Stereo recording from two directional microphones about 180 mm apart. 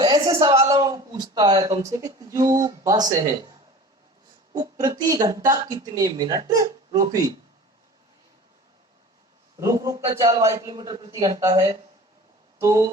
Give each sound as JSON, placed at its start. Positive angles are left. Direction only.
{"t": 0.0, "sound": "speech", "side_deg": -20}
{"t": 4.5, "sound": "speech", "side_deg": -20}
{"t": 9.6, "sound": "a man's voice", "side_deg": -20}